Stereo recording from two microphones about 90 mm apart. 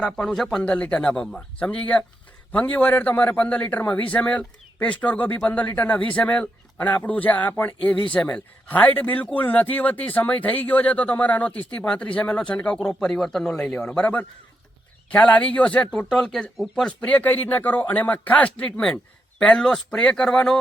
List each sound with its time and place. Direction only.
0.0 s a man's voice: 5° left (ahead or behind)